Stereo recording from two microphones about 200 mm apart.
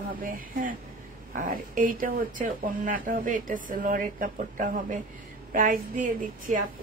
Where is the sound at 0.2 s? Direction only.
45° right (ahead or behind).